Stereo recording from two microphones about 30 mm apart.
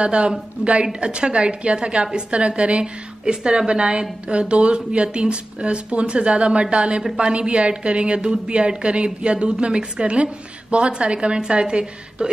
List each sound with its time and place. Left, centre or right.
0.0 s a woman's voice: right
3.3 s speech: right